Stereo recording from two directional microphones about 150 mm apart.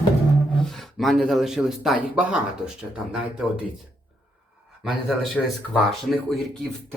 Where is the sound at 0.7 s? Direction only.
Centre (ahead or behind).